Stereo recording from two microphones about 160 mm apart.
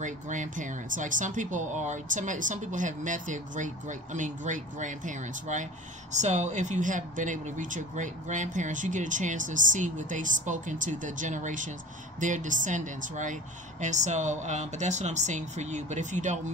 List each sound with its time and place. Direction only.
0.0 s speech: 50° right (ahead or behind)